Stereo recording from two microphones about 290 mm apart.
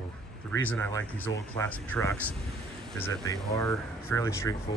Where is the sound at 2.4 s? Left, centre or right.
Centre.